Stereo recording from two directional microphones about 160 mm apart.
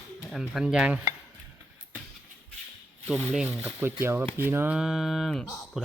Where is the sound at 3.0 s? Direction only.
5° right (ahead or behind).